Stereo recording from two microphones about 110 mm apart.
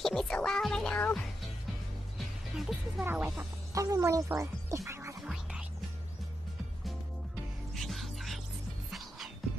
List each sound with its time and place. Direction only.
0.0 s music: 5° left (ahead or behind)
2.1 s music: centre (ahead or behind)
3.0 s speech: 15° right (ahead or behind)
3.7 s speech: 30° right (ahead or behind)
5.2 s music: 5° right (ahead or behind)
7.7 s music: centre (ahead or behind)